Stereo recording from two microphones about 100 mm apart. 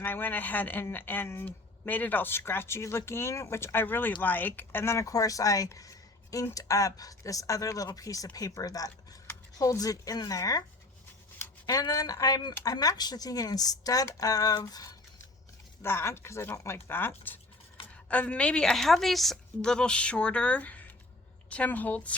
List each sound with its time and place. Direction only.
0.0 s speech: 20° left (ahead or behind); by 10.6 s 35° left (ahead or behind)
11.6 s speech: 40° left (ahead or behind)
15.8 s a woman's voice: 25° left (ahead or behind)